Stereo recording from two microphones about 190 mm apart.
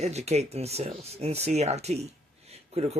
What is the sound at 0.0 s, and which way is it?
Speech, 35° right (ahead or behind).